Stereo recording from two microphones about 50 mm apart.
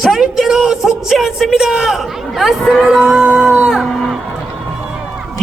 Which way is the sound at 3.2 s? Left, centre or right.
Centre.